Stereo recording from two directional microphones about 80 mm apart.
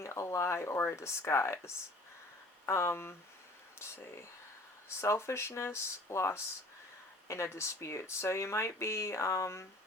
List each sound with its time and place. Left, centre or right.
0.0 s speech: left